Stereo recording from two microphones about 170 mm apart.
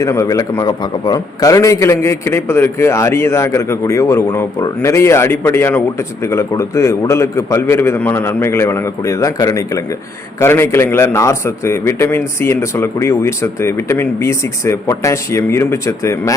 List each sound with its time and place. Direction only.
0.0 s a man's voice: 20° left (ahead or behind)